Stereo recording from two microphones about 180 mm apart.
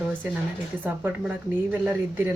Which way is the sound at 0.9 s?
10° right (ahead or behind).